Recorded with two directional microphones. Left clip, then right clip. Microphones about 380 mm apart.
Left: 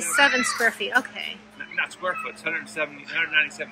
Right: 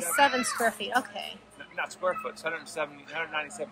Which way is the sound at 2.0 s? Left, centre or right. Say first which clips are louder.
Left 3 dB; centre.